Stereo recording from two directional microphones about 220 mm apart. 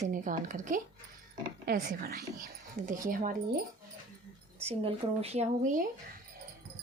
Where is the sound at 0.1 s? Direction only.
35° right (ahead or behind).